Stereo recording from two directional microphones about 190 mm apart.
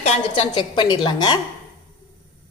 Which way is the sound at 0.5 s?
25° left (ahead or behind).